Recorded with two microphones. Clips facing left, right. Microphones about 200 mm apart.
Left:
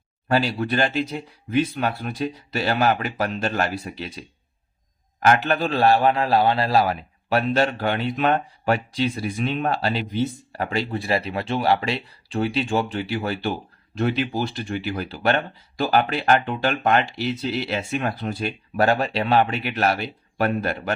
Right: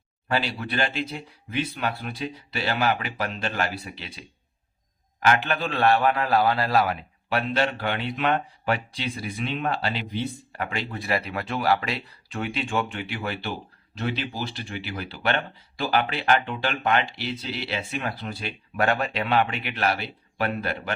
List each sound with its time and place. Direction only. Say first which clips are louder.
0.3 s speech: left 6 dB; 45° left (ahead or behind)
5.2 s speech: left 4 dB; 45° left (ahead or behind)